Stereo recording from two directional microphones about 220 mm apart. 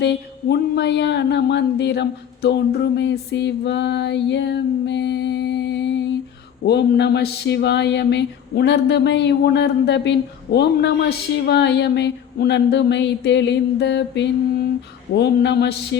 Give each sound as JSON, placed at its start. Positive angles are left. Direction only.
{"t": 0.0, "sound": "speech", "side_deg": 50}